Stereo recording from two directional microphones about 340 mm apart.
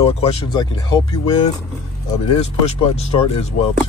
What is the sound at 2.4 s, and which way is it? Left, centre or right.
Speech, centre.